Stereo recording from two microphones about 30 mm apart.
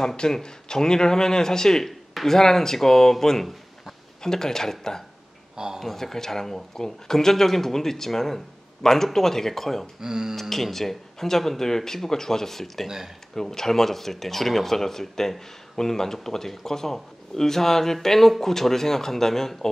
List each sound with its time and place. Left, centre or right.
0.0 s speech: left; by 9.8 s centre
9.9 s speech: right
10.5 s speech: centre
12.8 s speech: centre
13.3 s speech: centre